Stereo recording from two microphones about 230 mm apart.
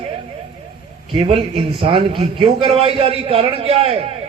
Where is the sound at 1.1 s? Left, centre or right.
Right.